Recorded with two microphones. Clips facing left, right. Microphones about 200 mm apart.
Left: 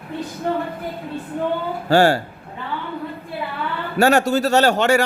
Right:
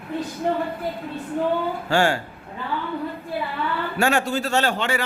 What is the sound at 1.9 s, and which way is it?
Speech, 35° left (ahead or behind).